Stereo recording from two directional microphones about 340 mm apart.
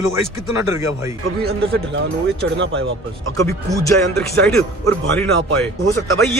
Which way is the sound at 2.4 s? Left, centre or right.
Right.